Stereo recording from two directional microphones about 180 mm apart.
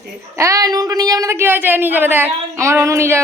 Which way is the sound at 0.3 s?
15° right (ahead or behind).